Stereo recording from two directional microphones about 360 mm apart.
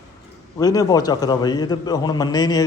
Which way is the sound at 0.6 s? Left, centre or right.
Centre.